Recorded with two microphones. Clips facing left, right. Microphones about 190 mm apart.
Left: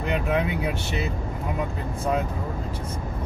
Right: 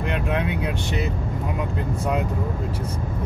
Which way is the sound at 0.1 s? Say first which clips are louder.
Left 2 dB; centre (ahead or behind).